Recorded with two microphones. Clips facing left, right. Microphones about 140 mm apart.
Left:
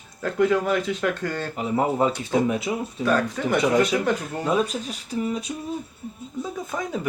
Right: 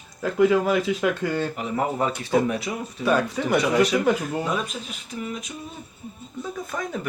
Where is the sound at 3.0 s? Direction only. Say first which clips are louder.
Right 1 dB; 10° right (ahead or behind).